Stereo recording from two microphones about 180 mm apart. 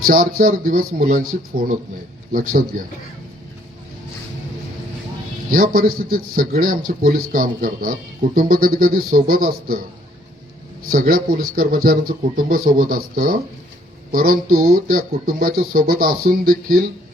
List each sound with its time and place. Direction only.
0.1 s speech: 50° right (ahead or behind)
5.5 s speech: 50° right (ahead or behind)
10.8 s speech: 50° right (ahead or behind)